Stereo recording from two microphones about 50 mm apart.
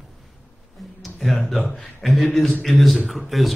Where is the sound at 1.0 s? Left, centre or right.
Centre.